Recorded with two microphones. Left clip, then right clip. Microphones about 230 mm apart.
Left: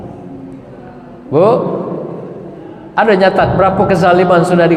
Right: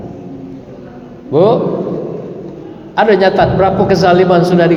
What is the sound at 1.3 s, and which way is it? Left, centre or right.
Speech, left.